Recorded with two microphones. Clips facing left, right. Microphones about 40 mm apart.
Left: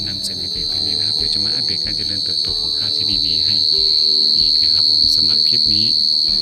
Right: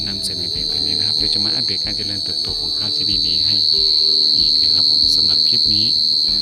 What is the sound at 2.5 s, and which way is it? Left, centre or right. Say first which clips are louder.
Speech: left 2 dB; left.